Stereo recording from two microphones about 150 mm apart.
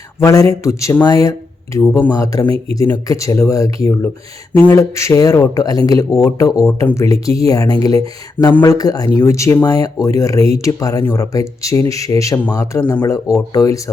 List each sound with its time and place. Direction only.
0.2 s speech: 20° left (ahead or behind)
2.1 s speech: 25° left (ahead or behind)